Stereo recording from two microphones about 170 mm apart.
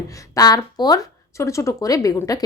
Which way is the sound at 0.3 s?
25° left (ahead or behind).